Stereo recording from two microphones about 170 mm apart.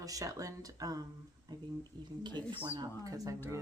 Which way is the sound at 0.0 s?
20° right (ahead or behind).